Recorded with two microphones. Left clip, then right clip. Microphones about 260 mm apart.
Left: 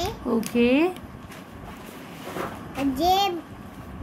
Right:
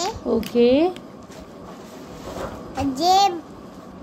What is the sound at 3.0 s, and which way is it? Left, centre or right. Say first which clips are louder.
Speech: right 5 dB; centre.